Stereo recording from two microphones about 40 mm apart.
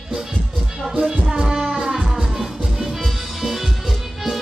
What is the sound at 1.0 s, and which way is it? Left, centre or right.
Music, centre.